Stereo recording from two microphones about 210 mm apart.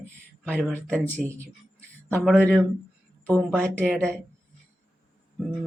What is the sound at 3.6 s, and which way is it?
Speech, 5° left (ahead or behind).